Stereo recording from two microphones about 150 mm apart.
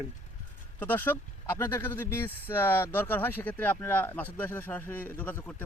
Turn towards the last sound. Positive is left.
turn(degrees=10)  # may be behind; listen again after turning